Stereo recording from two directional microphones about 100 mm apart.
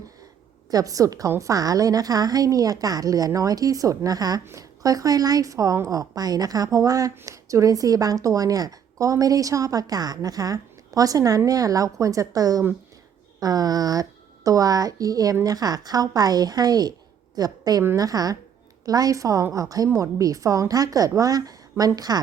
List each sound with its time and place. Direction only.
0.7 s a woman's voice: 35° right (ahead or behind)